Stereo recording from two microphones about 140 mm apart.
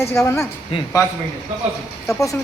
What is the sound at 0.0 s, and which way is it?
Speech, 20° left (ahead or behind).